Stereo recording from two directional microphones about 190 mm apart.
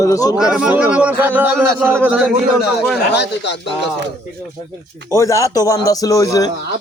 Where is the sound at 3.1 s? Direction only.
65° left (ahead or behind).